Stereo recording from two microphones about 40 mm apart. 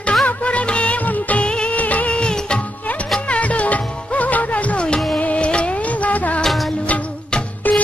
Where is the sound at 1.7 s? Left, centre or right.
Left.